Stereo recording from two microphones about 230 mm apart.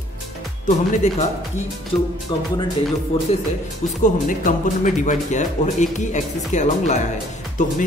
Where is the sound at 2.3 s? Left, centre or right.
Centre.